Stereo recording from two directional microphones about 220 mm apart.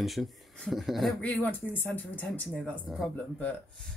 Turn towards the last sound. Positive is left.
turn(degrees=5)  # may be behind; listen again after turning